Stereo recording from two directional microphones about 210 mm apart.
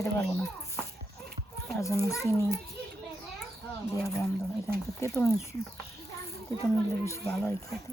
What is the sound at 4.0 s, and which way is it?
Speech, 15° left (ahead or behind).